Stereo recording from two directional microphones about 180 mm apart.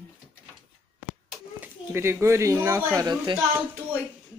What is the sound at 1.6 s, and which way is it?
A child's voice, 10° right (ahead or behind).